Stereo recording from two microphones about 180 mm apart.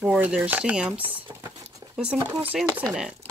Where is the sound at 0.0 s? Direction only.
5° right (ahead or behind).